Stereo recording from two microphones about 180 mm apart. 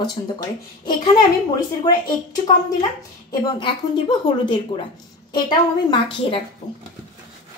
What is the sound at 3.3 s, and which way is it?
A woman's voice, 25° left (ahead or behind).